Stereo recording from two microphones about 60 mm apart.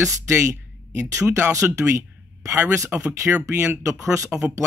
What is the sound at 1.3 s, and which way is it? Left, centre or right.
Speech, right.